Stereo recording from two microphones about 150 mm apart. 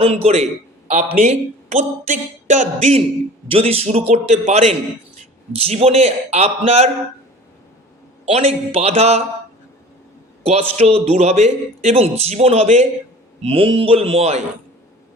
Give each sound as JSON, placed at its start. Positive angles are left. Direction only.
{"t": 0.0, "sound": "a man's voice", "side_deg": -40}
{"t": 0.9, "sound": "a man's voice", "side_deg": -55}
{"t": 3.5, "sound": "a man's voice", "side_deg": -40}
{"t": 8.2, "sound": "a man's voice", "side_deg": -45}
{"t": 10.4, "sound": "a man's voice", "side_deg": -45}